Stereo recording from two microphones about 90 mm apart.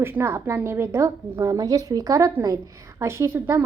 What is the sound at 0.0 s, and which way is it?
A woman's voice, 25° right (ahead or behind).